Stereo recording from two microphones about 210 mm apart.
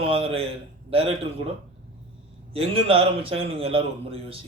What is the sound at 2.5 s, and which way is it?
A man's voice, 25° right (ahead or behind).